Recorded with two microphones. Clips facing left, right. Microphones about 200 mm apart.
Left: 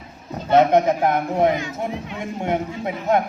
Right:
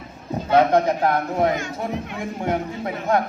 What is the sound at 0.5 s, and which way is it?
Speech, 20° left (ahead or behind).